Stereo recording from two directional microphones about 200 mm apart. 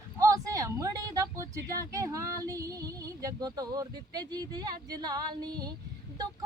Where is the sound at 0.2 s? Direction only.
15° right (ahead or behind).